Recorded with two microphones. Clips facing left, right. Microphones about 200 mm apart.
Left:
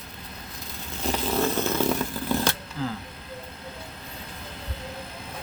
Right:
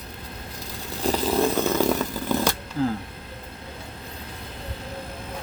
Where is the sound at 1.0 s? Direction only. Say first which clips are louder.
Right 4 dB; 35° right (ahead or behind).